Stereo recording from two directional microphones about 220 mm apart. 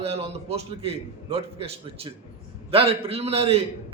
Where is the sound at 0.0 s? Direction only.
25° right (ahead or behind).